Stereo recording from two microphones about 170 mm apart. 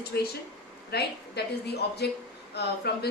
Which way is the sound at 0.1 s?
80° left.